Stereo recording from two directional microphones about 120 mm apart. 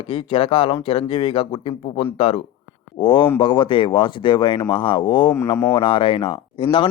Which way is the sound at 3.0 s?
45° left (ahead or behind).